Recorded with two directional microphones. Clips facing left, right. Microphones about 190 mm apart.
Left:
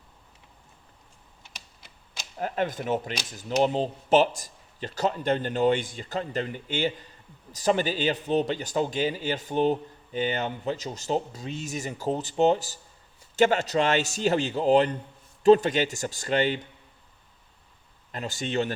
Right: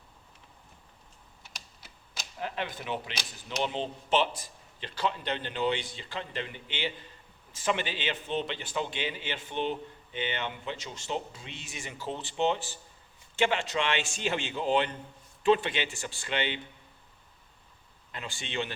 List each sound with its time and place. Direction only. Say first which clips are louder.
2.4 s a man's voice: left 7 dB; 45° left (ahead or behind)
18.1 s a man's voice: left 8 dB; 40° left (ahead or behind)